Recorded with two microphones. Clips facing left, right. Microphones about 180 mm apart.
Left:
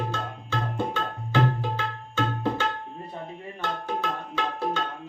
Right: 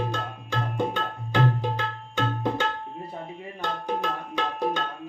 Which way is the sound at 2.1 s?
15° right (ahead or behind).